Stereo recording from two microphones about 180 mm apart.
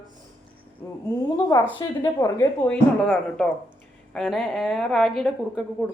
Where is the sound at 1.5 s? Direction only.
20° left (ahead or behind).